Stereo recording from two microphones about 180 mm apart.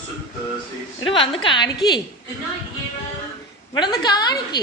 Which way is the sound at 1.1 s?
30° left (ahead or behind).